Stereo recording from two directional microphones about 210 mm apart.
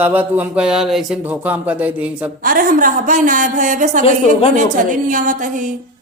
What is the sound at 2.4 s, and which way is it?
A woman's voice, 40° right (ahead or behind).